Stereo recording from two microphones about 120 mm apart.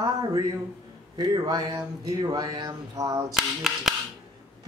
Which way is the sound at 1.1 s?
35° right (ahead or behind).